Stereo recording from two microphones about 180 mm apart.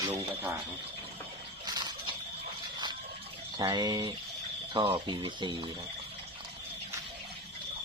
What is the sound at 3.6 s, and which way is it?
Speech, 25° right (ahead or behind).